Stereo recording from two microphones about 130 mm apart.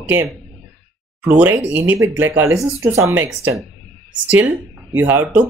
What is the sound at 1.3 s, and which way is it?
Speech, 15° right (ahead or behind).